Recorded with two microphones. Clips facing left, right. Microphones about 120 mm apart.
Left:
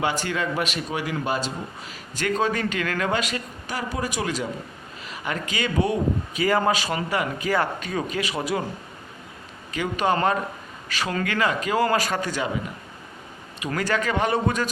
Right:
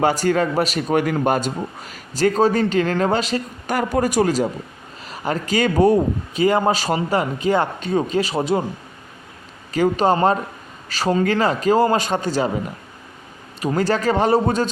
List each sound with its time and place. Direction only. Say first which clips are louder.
0.0 s a man's voice: right 8 dB; 40° right (ahead or behind)
2.1 s a man's voice: right 7 dB; 35° right (ahead or behind)
3.7 s a man's voice: right 9 dB; 50° right (ahead or behind)
6.4 s speech: right 4 dB; 25° right (ahead or behind)
6.7 s speech: right 5 dB; 35° right (ahead or behind)
9.7 s a man's voice: right 6 dB; 35° right (ahead or behind)
13.7 s a man's voice: right 5 dB; 30° right (ahead or behind)